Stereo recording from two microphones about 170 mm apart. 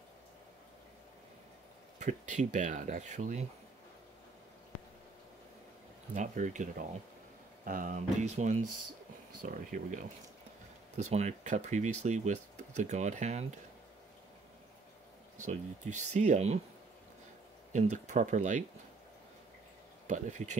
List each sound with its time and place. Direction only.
2.0 s speech: 45° right (ahead or behind)
6.1 s speech: 45° right (ahead or behind)
11.0 s speech: 40° right (ahead or behind)
15.3 s speech: 45° right (ahead or behind)
17.7 s speech: 45° right (ahead or behind)
20.1 s speech: 45° right (ahead or behind)